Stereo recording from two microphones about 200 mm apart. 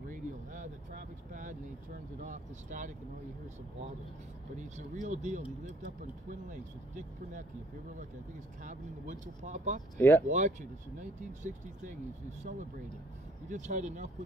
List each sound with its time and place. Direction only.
0.1 s vehicle: 40° right (ahead or behind)
2.2 s speech: 40° right (ahead or behind)
5.0 s speech: 35° right (ahead or behind)
6.4 s speech: 40° right (ahead or behind)
9.2 s speech: 40° right (ahead or behind)
9.9 s speech: 10° left (ahead or behind)
10.2 s speech: 40° right (ahead or behind)